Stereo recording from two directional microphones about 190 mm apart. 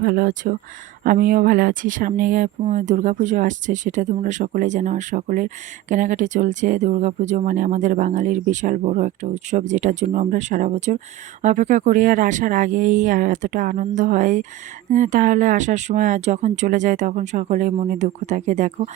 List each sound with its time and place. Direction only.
0.0 s speech: 45° right (ahead or behind)